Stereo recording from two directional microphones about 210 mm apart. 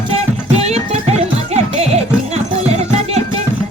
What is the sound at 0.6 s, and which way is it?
Music, 30° right (ahead or behind).